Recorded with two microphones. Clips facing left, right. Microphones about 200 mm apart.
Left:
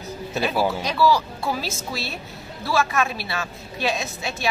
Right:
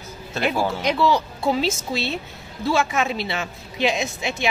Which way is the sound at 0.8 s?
20° right (ahead or behind).